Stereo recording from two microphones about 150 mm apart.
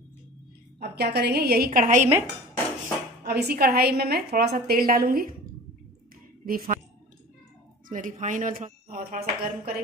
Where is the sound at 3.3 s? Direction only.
90° right; by 5.3 s 75° right (ahead or behind).